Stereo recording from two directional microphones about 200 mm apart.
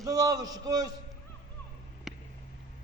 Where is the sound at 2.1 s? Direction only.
Centre (ahead or behind).